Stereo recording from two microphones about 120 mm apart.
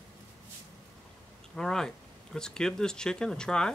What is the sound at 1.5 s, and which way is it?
Speech, 5° left (ahead or behind).